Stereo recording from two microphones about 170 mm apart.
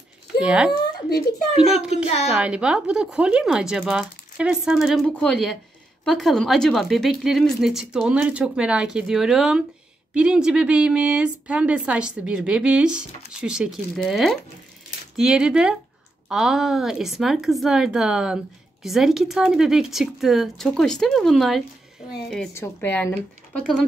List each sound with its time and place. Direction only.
0.4 s speech: 5° right (ahead or behind)
2.3 s a woman's voice: 5° right (ahead or behind)
22.5 s speech: 15° left (ahead or behind)